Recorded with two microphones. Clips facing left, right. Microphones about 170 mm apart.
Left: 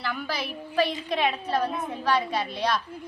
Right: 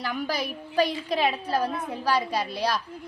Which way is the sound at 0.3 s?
40° right (ahead or behind).